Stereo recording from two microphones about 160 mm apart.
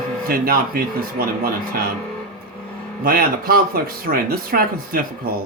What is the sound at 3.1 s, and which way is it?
Speech, 70° right (ahead or behind).